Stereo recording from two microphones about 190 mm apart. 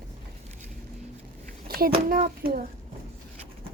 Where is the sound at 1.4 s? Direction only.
50° right (ahead or behind).